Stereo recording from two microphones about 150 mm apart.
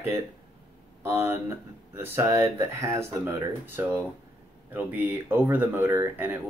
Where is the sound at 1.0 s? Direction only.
15° right (ahead or behind).